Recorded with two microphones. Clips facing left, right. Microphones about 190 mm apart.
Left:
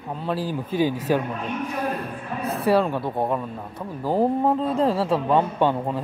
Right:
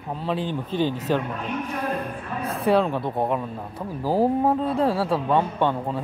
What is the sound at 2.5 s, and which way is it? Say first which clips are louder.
A man's voice: even; centre (ahead or behind).